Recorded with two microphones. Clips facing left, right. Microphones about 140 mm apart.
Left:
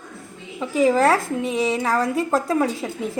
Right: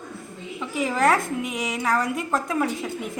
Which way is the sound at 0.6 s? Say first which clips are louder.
Left 6 dB; 35° left (ahead or behind).